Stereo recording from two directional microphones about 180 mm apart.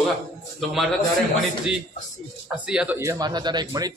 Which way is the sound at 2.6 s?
5° right (ahead or behind).